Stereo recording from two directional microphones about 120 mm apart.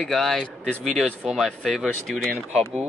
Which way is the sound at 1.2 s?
Centre (ahead or behind).